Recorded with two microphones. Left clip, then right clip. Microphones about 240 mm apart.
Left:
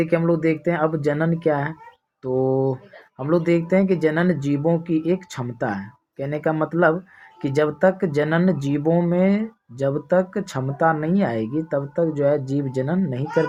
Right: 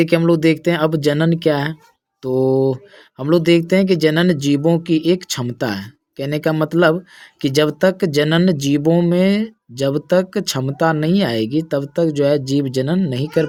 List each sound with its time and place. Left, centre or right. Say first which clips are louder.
0.0 s speech: right 5 dB; right